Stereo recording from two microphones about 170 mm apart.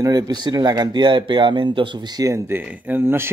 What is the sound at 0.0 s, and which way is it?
Speech, 20° right (ahead or behind).